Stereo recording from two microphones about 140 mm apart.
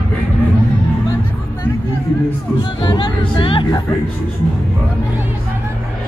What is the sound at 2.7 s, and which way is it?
Speech, 35° left (ahead or behind).